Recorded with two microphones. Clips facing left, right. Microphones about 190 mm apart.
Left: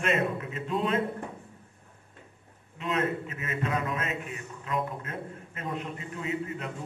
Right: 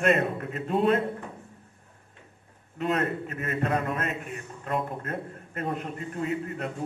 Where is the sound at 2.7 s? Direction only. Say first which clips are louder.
Right 2 dB; 55° right (ahead or behind).